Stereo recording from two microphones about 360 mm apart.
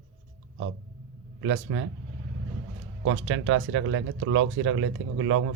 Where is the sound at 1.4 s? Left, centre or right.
Right.